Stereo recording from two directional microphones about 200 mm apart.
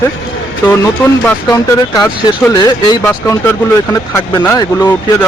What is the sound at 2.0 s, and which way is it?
A man's voice, 15° left (ahead or behind).